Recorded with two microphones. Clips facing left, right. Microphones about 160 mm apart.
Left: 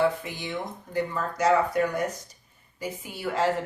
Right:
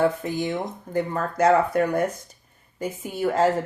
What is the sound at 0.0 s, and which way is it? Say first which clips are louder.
Speech: right 3 dB; 45° right (ahead or behind).